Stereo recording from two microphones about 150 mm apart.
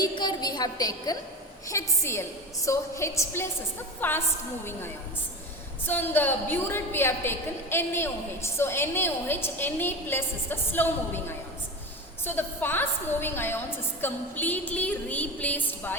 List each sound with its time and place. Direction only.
0.0 s a sound: 30° left (ahead or behind)
1.6 s a woman's voice: 20° left (ahead or behind)
5.8 s a woman's voice: 15° left (ahead or behind)